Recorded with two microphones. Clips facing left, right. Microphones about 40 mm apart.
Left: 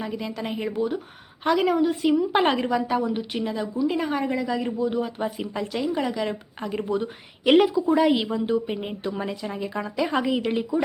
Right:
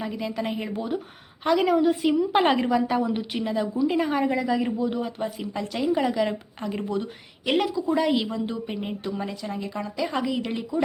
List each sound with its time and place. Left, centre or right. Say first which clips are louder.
0.0 s a woman's voice: right 1 dB; centre
7.9 s a woman's voice: left 3 dB; centre